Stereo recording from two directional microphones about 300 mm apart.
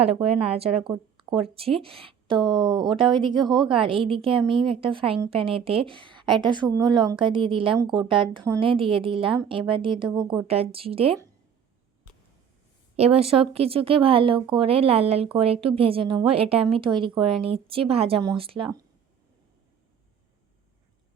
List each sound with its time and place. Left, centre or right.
0.0 s a woman's voice: centre
13.1 s a woman's voice: centre